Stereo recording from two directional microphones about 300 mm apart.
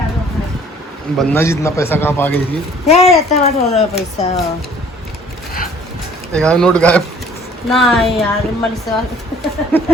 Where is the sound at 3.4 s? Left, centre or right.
Left.